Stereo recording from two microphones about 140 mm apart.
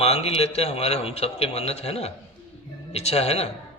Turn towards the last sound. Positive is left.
turn(degrees=45)  # may be behind; listen again after turning